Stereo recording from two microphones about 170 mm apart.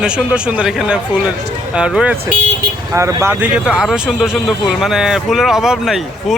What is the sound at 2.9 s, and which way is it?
Speech, 15° right (ahead or behind).